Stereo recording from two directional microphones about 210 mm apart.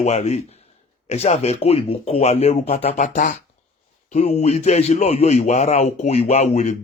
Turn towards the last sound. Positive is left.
turn(degrees=35)  # may be behind; listen again after turning